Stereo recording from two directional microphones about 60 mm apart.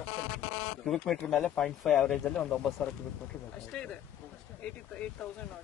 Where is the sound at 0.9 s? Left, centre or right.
Centre.